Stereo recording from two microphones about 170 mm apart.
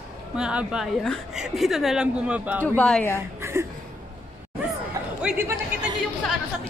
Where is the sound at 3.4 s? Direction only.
15° right (ahead or behind).